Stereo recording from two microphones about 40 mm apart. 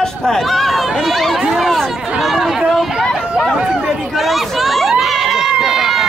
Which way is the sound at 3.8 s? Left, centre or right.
Centre.